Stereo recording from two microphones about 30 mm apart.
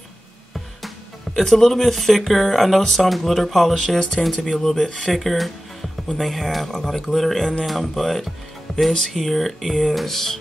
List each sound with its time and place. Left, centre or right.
0.8 s speech: centre
2.8 s speech: centre
3.1 s speech: centre
5.1 s speech: centre